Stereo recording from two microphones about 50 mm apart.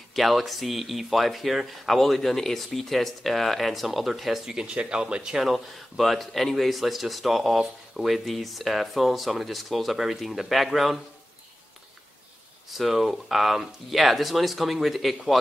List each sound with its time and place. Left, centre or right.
0.1 s speech: centre
4.6 s speech: right
5.4 s speech: centre
12.7 s speech: centre